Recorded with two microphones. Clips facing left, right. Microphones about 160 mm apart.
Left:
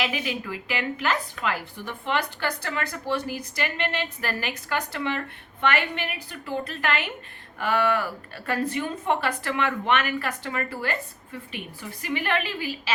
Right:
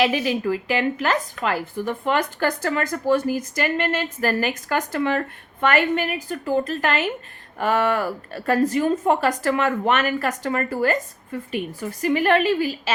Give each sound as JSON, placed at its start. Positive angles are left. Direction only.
{"t": 0.0, "sound": "a woman's voice", "side_deg": -35}